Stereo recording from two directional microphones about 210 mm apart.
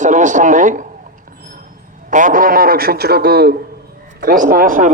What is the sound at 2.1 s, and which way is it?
A man's voice, 40° right (ahead or behind).